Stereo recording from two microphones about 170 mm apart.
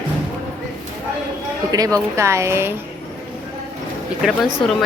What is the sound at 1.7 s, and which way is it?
A woman's voice, 20° right (ahead or behind).